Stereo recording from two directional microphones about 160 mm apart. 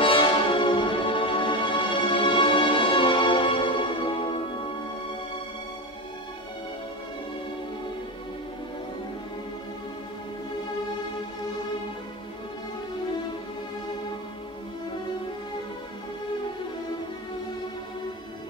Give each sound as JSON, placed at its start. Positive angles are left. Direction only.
{"t": 0.0, "sound": "music", "side_deg": 35}